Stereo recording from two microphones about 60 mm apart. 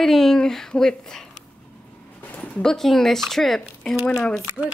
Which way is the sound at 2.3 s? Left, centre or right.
Centre.